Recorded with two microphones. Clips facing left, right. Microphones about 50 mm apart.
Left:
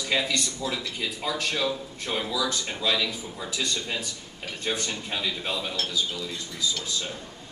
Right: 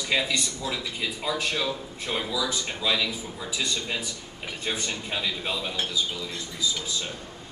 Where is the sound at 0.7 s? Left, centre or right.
Centre.